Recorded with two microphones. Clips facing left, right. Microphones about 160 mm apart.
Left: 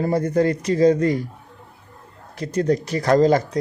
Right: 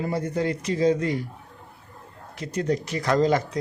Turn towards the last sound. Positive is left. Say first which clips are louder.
# left 5 dB
turn(degrees=40)  # may be behind; listen again after turning